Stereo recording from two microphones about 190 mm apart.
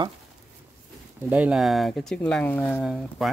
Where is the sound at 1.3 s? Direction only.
5° right (ahead or behind).